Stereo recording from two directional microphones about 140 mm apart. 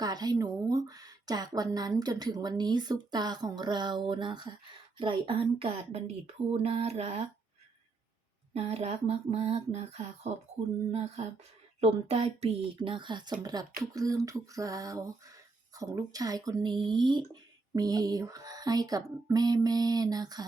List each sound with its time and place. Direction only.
0.0 s speech: 30° right (ahead or behind); by 7.3 s 45° right (ahead or behind)
8.5 s speech: 50° right (ahead or behind); by 20.4 s 30° right (ahead or behind)